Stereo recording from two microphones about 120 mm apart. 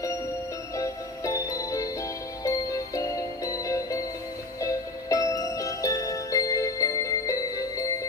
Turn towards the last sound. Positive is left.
turn(degrees=25)  # may be behind; listen again after turning